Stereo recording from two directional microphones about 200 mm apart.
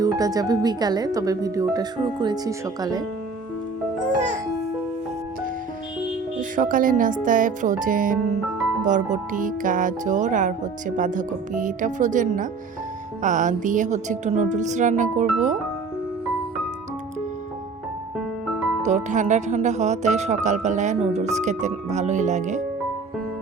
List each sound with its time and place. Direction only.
0.0 s speech: 20° right (ahead or behind)
6.6 s speech: 40° right (ahead or behind)
18.9 s speech: 35° right (ahead or behind)